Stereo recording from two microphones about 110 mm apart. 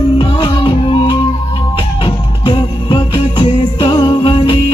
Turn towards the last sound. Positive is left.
turn(degrees=50)  # may be behind; listen again after turning